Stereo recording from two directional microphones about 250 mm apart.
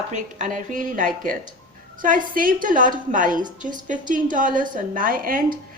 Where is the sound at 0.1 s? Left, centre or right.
Right.